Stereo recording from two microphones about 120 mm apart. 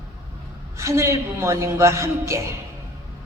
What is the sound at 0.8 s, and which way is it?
A man's voice, 25° right (ahead or behind).